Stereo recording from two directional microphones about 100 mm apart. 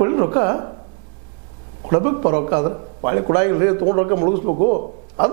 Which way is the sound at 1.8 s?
20° right (ahead or behind).